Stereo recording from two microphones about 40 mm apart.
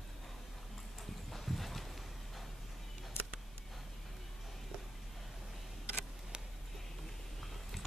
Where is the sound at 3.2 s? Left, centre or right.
Left.